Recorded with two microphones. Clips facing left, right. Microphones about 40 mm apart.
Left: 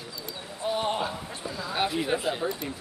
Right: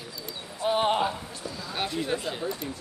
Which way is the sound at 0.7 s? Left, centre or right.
Right.